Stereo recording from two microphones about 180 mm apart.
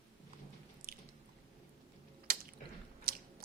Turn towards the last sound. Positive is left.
turn(degrees=-55)  # may be behind; listen again after turning